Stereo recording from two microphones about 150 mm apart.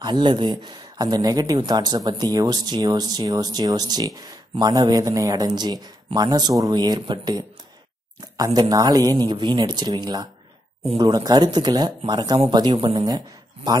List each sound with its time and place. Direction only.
0.0 s speech: 30° right (ahead or behind)
8.5 s speech: 25° right (ahead or behind)